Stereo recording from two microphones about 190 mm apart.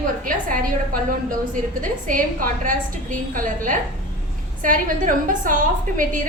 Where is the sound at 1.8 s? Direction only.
45° right (ahead or behind).